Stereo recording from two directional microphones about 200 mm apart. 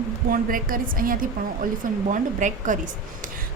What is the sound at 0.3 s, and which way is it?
A woman's voice, 45° right (ahead or behind).